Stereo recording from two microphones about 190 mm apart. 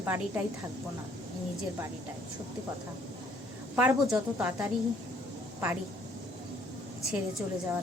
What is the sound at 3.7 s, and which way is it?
Speech, 10° right (ahead or behind).